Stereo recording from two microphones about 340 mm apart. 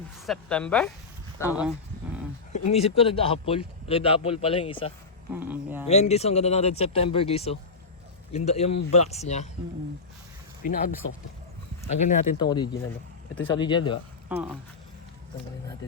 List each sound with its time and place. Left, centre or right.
0.3 s speech: centre
2.5 s speech: centre
5.3 s a sound: centre
5.9 s speech: centre
10.6 s speech: left
14.3 s speech: centre